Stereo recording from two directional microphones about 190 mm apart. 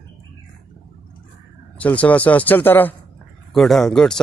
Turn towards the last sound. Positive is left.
turn(degrees=5)  # may be behind; listen again after turning